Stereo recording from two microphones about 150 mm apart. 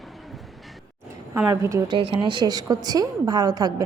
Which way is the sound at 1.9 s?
35° right (ahead or behind).